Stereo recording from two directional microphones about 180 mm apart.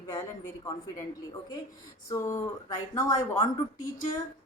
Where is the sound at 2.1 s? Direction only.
15° left (ahead or behind).